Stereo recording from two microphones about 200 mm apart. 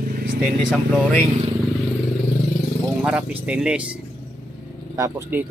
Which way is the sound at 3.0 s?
5° right (ahead or behind).